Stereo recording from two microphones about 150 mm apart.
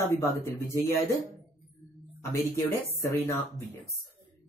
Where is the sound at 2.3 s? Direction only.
15° left (ahead or behind).